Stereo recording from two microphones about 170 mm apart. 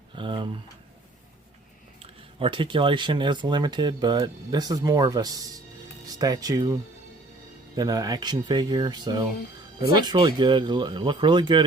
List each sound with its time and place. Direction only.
0.2 s speech: 30° right (ahead or behind)
2.0 s speech: 30° right (ahead or behind)
7.8 s speech: 20° right (ahead or behind)